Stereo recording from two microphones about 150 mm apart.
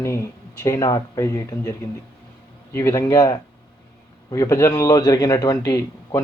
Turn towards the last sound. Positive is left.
turn(degrees=20)  # may be behind; listen again after turning